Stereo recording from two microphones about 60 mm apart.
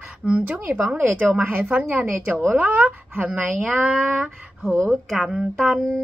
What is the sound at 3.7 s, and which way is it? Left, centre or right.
Speech, centre.